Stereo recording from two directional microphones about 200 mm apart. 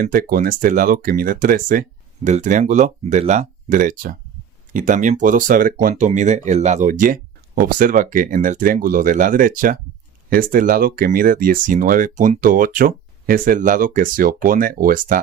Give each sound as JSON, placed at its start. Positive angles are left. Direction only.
{"t": 0.0, "sound": "speech", "side_deg": -45}